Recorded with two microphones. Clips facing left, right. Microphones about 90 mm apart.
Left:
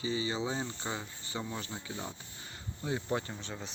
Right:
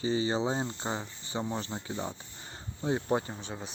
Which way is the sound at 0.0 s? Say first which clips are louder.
Right 5 dB; 35° right (ahead or behind).